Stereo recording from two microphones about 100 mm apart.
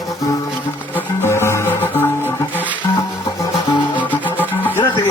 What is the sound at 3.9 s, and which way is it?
Music, 15° left (ahead or behind).